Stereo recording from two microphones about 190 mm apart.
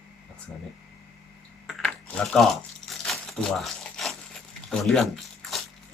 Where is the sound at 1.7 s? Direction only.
Centre (ahead or behind).